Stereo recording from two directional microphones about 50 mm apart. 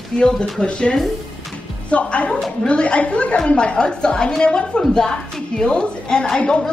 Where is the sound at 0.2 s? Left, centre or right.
Centre.